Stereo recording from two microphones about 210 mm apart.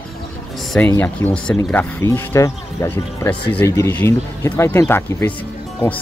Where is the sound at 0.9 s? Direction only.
10° left (ahead or behind).